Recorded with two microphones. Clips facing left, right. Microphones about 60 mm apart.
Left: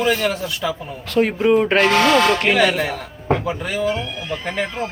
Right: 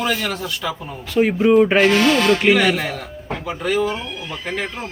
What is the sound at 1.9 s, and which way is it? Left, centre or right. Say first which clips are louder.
Speech: left 1 dB; left.